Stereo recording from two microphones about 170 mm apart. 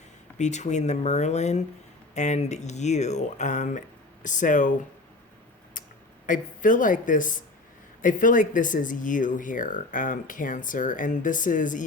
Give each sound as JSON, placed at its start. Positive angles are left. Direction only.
{"t": 0.3, "sound": "speech", "side_deg": 45}
{"t": 5.8, "sound": "a sound", "side_deg": 50}
{"t": 6.2, "sound": "speech", "side_deg": 50}